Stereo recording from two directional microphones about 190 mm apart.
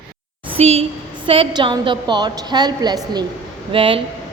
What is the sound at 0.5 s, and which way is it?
A woman's voice, 35° right (ahead or behind).